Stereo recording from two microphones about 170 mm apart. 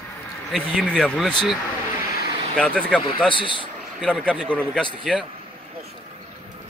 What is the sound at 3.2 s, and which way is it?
Speech, 30° left (ahead or behind).